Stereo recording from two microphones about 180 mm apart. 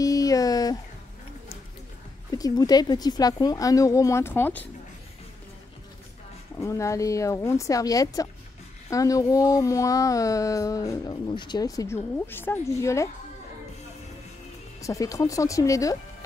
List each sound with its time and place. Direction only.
0.0 s a sound: 20° left (ahead or behind)
2.3 s speech: 20° left (ahead or behind)
6.6 s speech: 15° left (ahead or behind)
14.8 s speech: 20° left (ahead or behind)